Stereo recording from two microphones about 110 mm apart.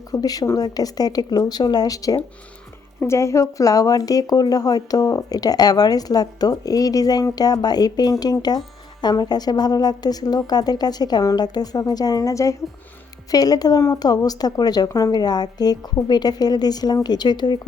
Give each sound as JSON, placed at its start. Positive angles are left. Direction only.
{"t": 0.1, "sound": "speech", "side_deg": 35}